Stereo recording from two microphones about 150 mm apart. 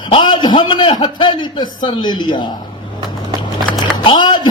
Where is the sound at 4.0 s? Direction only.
30° left (ahead or behind).